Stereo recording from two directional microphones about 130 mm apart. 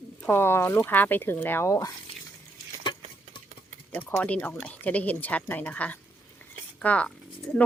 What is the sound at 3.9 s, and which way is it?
Speech, 10° left (ahead or behind).